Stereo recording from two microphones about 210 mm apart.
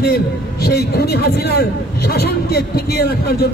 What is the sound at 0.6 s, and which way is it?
A man's voice, 50° left (ahead or behind).